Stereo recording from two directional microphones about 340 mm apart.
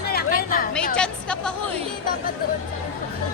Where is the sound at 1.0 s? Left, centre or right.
Centre.